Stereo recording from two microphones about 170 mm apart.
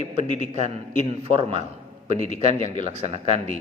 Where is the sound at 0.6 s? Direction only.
40° right (ahead or behind).